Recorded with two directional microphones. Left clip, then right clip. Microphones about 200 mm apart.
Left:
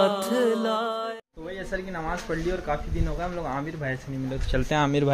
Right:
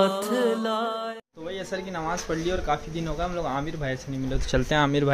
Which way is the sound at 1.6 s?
5° right (ahead or behind).